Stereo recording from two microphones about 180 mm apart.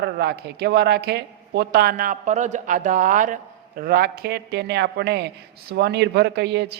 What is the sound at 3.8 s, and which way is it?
A man's voice, 60° right (ahead or behind).